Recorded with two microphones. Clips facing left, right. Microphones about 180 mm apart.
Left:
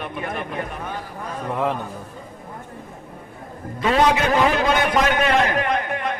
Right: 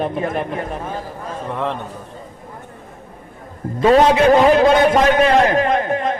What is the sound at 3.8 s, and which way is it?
A man's voice, 35° right (ahead or behind).